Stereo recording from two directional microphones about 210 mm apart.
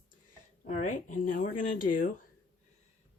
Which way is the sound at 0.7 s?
35° left (ahead or behind).